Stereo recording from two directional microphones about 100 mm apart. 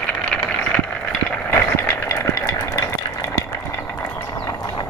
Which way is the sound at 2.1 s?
30° left (ahead or behind).